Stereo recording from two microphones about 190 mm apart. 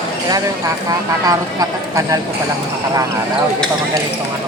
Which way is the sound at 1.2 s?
20° right (ahead or behind).